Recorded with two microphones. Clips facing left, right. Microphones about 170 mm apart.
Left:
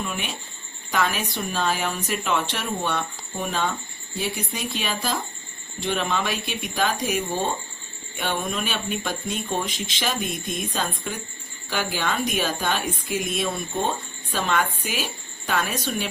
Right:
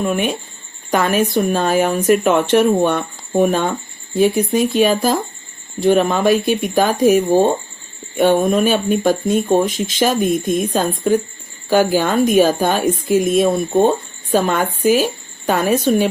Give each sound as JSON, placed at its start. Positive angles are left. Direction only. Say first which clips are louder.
{"t": 0.0, "sound": "a woman's voice", "louder": "right 12 dB", "side_deg": -55}